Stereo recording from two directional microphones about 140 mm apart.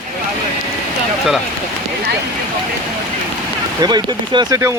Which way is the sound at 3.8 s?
30° right (ahead or behind).